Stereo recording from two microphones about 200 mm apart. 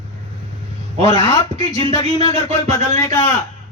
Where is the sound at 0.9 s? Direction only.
35° right (ahead or behind).